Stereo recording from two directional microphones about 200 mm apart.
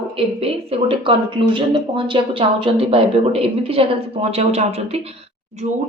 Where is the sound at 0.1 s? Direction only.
30° right (ahead or behind).